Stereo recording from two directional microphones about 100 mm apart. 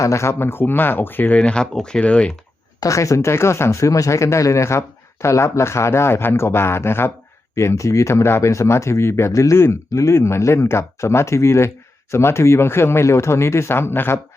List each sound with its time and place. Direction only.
0.0 s speech: 30° left (ahead or behind); by 2.3 s 10° left (ahead or behind)
2.8 s speech: 30° left (ahead or behind)